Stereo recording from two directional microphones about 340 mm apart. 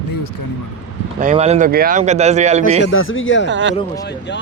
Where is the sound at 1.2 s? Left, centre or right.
Centre.